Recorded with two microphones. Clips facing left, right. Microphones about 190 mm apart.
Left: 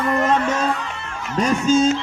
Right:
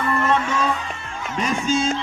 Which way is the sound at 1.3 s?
40° left (ahead or behind).